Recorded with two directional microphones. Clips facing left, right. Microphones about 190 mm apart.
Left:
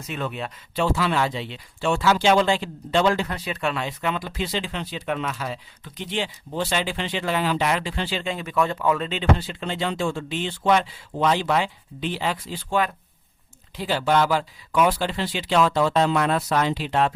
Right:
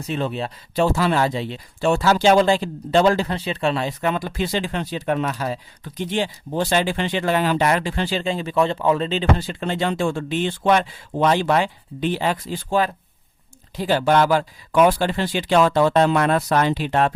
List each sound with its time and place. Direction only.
0.0 s speech: 30° right (ahead or behind)
0.9 s speech: 45° right (ahead or behind)
8.2 s speech: 30° right (ahead or behind)
9.5 s speech: 50° right (ahead or behind)
13.7 s speech: 50° right (ahead or behind)